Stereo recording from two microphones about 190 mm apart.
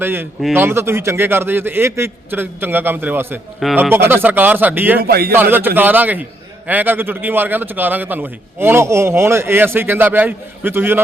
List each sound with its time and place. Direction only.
0.0 s a man's voice: 10° right (ahead or behind)
3.6 s speech: centre (ahead or behind)
3.8 s a man's voice: 10° right (ahead or behind)
5.0 s a man's voice: 55° right (ahead or behind)
5.4 s a man's voice: 10° right (ahead or behind)